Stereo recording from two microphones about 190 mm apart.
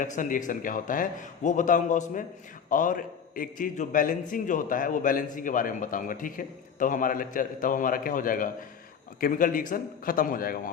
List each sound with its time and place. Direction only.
0.0 s a man's voice: 45° left (ahead or behind)